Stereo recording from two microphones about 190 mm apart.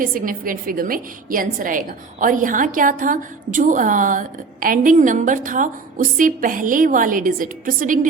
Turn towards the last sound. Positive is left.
turn(degrees=-45)  # may be behind; listen again after turning